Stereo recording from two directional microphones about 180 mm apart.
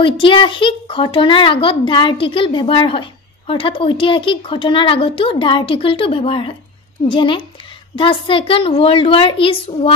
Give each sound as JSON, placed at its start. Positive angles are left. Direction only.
{"t": 0.0, "sound": "a woman's voice", "side_deg": 30}